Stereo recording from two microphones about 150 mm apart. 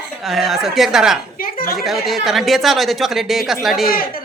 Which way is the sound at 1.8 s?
Centre (ahead or behind).